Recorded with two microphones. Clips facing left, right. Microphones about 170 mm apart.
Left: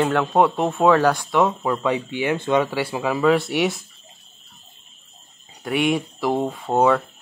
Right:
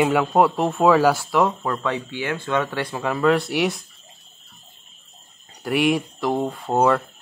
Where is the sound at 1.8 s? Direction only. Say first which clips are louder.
Left 4 dB; 15° left (ahead or behind).